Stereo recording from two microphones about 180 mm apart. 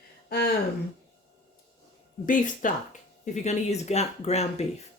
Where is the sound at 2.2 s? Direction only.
45° left (ahead or behind).